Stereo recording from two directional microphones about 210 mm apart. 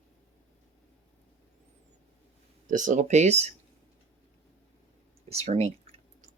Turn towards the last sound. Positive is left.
turn(degrees=-30)  # may be behind; listen again after turning